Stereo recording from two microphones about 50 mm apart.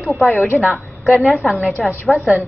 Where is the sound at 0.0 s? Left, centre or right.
Centre.